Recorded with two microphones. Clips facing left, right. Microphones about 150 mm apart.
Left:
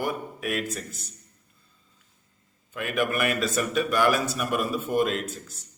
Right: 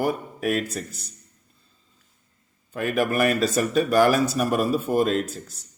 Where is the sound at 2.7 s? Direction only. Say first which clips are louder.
Right 4 dB; 35° right (ahead or behind).